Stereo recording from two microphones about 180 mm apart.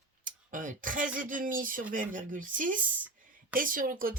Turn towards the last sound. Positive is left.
turn(degrees=-50)  # may be behind; listen again after turning